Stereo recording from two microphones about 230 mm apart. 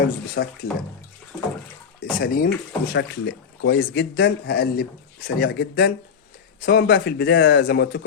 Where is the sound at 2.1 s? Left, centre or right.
Left.